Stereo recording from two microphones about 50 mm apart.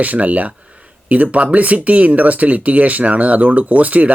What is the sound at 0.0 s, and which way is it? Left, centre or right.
Speech, right.